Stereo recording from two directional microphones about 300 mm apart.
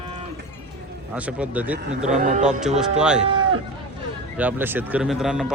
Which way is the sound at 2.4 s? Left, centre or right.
Centre.